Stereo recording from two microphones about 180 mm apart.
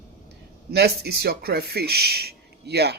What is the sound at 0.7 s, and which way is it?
Speech, 65° right (ahead or behind).